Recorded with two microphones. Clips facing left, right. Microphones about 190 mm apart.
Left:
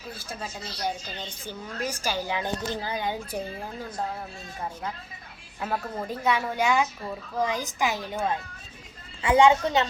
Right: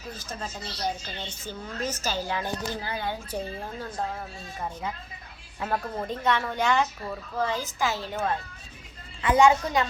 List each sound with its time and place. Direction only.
0.1 s speech: 10° left (ahead or behind)
5.5 s speech: centre (ahead or behind)
9.4 s a woman's voice: 25° left (ahead or behind)